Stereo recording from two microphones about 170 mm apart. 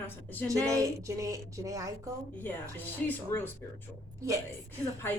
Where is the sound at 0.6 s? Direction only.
20° right (ahead or behind).